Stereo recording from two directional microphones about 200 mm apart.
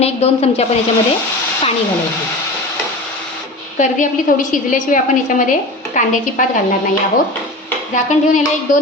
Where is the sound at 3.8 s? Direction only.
40° left (ahead or behind).